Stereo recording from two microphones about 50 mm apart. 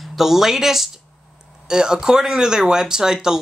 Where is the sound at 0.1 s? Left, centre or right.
Centre.